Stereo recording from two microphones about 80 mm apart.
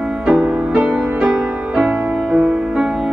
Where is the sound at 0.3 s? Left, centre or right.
Centre.